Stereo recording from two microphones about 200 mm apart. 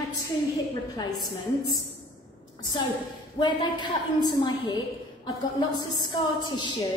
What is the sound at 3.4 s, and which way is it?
A woman's voice, 25° left (ahead or behind).